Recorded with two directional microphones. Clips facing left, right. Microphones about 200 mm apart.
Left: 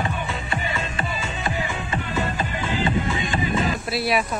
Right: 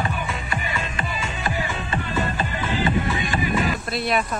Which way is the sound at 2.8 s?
20° left (ahead or behind).